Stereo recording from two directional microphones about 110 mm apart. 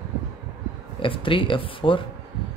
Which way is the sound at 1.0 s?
50° left (ahead or behind).